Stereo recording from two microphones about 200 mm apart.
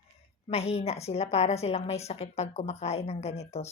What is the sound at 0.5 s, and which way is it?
A woman's voice, 30° left (ahead or behind).